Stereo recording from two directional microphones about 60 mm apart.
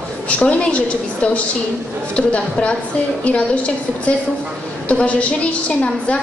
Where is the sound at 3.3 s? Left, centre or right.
Left.